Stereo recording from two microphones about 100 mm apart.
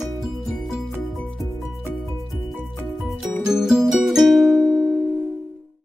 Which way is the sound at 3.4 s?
5° right (ahead or behind).